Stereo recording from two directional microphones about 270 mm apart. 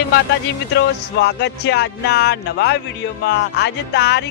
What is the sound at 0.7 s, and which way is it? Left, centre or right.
Speech, left.